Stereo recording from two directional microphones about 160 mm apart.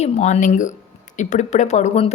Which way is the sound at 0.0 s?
45° left (ahead or behind).